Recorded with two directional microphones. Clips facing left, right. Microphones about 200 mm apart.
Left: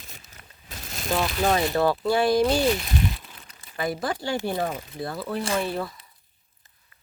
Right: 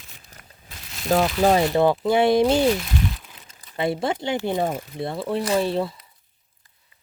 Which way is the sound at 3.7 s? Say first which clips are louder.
Right 4 dB; 25° right (ahead or behind).